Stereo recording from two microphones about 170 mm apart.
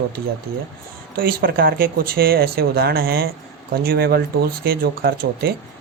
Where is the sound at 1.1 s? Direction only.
60° right (ahead or behind).